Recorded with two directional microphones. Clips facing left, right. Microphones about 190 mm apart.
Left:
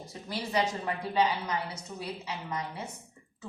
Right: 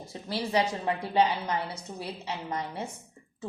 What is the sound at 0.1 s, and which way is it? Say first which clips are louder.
A woman's voice: right 4 dB; 30° right (ahead or behind).